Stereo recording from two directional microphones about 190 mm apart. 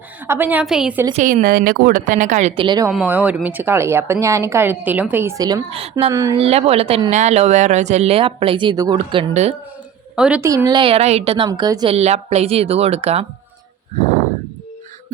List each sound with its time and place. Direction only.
0.3 s a woman's voice: 10° right (ahead or behind)
1.1 s a woman's voice: 45° right (ahead or behind)
2.6 s a woman's voice: 20° right (ahead or behind)
2.9 s a woman's voice: 5° right (ahead or behind)
5.7 s speech: 30° right (ahead or behind)
6.1 s a woman's voice: 15° right (ahead or behind)
6.3 s speech: 30° right (ahead or behind)
9.3 s speech: 35° right (ahead or behind)
10.2 s a woman's voice: 5° right (ahead or behind)
10.5 s a woman's voice: 20° right (ahead or behind)
11.9 s speech: 35° right (ahead or behind)